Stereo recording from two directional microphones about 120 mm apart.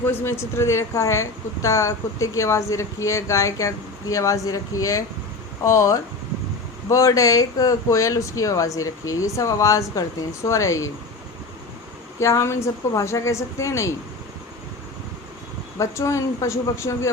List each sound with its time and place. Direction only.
0.0 s a woman's voice: 20° left (ahead or behind)
12.2 s a woman's voice: 25° left (ahead or behind)
15.8 s a woman's voice: 25° left (ahead or behind)